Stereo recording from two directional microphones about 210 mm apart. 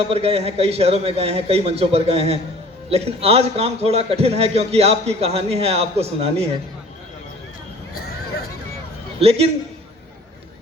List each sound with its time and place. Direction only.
0.0 s a man's voice: 30° right (ahead or behind)
9.2 s a man's voice: 30° right (ahead or behind)